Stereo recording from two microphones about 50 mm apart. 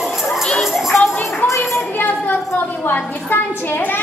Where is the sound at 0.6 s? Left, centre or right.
Centre.